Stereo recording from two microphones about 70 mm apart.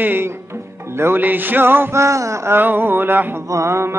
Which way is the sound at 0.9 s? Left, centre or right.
Right.